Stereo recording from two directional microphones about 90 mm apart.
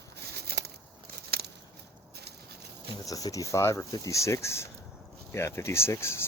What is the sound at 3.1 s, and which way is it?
Speech, 40° left (ahead or behind).